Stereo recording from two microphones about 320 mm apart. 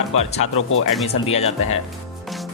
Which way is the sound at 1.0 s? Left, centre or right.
Centre.